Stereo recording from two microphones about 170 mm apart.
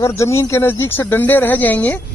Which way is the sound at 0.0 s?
15° left (ahead or behind).